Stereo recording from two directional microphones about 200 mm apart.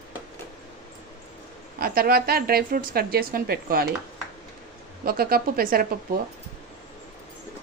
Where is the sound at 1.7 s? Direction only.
50° right (ahead or behind).